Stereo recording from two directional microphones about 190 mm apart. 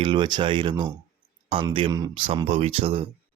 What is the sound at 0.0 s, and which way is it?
Speech, 25° right (ahead or behind).